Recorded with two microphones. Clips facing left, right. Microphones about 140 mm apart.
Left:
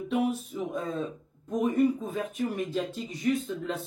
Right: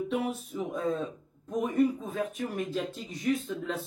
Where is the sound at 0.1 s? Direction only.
Centre (ahead or behind).